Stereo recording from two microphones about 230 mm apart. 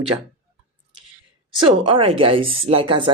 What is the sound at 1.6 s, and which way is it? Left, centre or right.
Speech, right.